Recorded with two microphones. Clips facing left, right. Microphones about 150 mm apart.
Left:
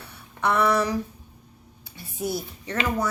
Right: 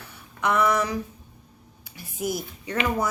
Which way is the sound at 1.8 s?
30° left (ahead or behind).